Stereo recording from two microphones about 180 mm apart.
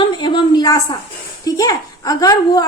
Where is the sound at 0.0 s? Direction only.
25° left (ahead or behind).